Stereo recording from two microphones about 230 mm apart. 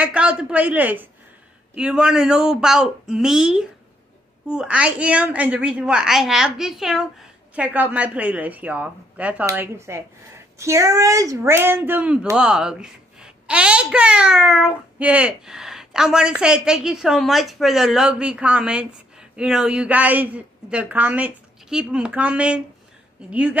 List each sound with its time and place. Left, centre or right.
0.0 s a woman's voice: centre